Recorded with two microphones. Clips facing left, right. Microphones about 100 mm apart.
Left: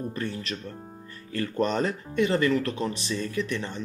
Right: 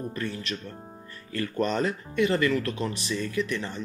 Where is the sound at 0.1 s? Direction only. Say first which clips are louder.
Even; 35° left (ahead or behind).